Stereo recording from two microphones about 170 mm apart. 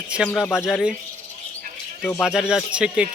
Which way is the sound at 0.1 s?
Centre (ahead or behind).